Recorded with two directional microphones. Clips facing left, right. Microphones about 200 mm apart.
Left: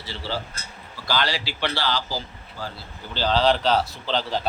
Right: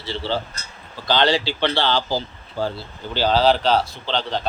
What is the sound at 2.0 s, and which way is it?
Speech, 65° right (ahead or behind).